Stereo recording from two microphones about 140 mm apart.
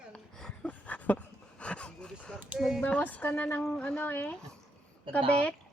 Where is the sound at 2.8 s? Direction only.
10° left (ahead or behind).